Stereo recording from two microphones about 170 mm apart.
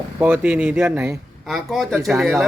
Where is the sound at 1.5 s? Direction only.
Centre (ahead or behind).